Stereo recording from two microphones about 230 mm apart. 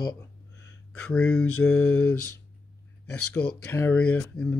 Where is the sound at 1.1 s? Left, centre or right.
Centre.